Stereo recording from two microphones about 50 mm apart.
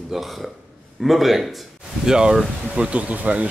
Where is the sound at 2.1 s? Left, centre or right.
Centre; by 3.5 s right.